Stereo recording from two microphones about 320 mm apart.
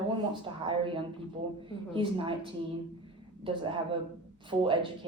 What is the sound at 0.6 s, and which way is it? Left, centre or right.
Speech, centre.